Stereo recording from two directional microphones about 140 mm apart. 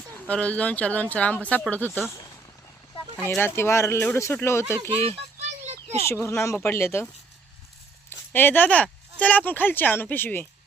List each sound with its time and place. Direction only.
0.3 s speech: 10° left (ahead or behind)
5.1 s a sound: 55° right (ahead or behind)
6.1 s speech: 20° left (ahead or behind)
8.3 s speech: 15° left (ahead or behind)